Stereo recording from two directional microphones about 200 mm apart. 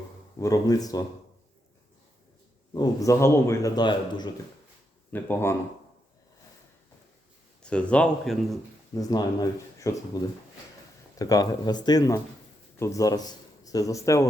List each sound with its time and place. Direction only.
0.3 s a man's voice: 15° left (ahead or behind)
2.7 s a man's voice: 15° left (ahead or behind)
5.1 s a man's voice: 10° left (ahead or behind)
7.6 s speech: 5° left (ahead or behind)
9.0 s a man's voice: 20° left (ahead or behind)